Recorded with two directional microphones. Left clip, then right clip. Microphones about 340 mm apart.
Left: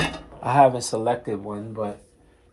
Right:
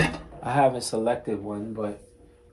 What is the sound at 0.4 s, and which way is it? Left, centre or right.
Speech, left.